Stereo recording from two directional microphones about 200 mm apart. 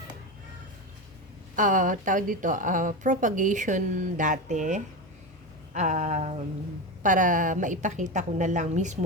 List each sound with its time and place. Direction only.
1.5 s a woman's voice: 40° right (ahead or behind)